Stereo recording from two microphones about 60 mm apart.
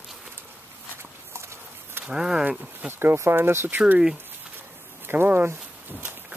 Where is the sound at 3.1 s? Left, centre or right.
Right.